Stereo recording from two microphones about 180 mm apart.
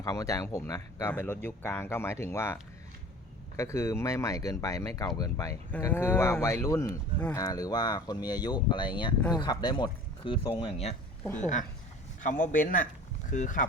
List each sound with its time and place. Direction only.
0.0 s speech: 20° left (ahead or behind)
3.6 s speech: 15° left (ahead or behind); by 10.9 s 35° left (ahead or behind)
11.2 s speech: 10° left (ahead or behind)
12.2 s a man's voice: 45° left (ahead or behind)